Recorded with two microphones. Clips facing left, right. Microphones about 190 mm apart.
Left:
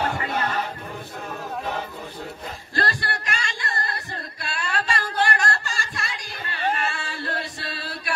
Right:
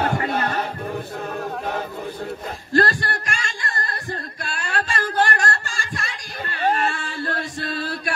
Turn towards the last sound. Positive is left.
turn(degrees=-50)  # may be behind; listen again after turning